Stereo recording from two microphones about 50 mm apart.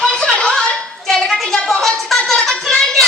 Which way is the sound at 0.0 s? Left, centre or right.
Centre.